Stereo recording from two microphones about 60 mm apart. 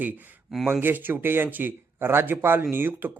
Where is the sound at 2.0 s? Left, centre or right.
Right.